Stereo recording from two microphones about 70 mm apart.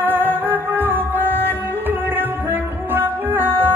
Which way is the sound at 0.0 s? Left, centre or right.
Right.